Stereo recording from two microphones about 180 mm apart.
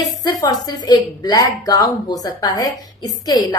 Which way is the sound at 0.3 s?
20° left (ahead or behind).